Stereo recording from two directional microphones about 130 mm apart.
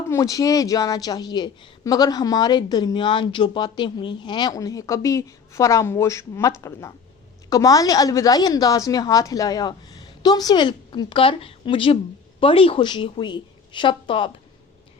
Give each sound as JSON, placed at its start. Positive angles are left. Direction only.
{"t": 0.1, "sound": "a woman's voice", "side_deg": 25}